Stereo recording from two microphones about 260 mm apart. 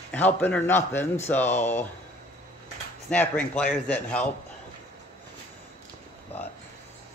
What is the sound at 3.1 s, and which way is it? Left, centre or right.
A man's voice, centre.